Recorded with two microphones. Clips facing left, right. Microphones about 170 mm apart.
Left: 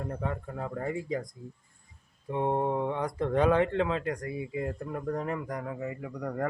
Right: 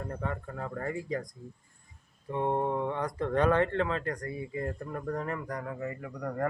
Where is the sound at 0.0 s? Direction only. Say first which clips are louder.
Left 2 dB; 10° left (ahead or behind).